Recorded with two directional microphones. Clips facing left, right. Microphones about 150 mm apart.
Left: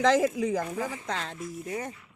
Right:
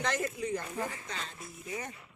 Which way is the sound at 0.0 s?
90° left.